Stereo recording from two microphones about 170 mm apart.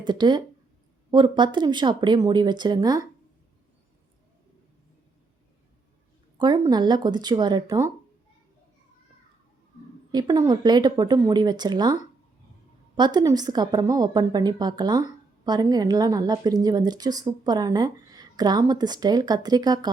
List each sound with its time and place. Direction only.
0.0 s speech: 25° right (ahead or behind)
6.4 s speech: 25° right (ahead or behind)
10.1 s speech: 25° right (ahead or behind)